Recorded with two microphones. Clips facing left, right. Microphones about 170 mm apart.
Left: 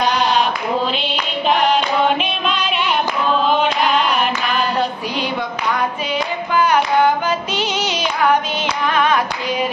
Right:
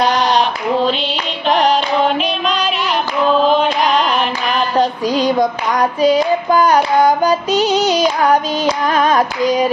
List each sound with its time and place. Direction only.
1.5 s a sound: 40° right (ahead or behind)
4.7 s female singing: 40° right (ahead or behind)
8.9 s hands: 40° right (ahead or behind)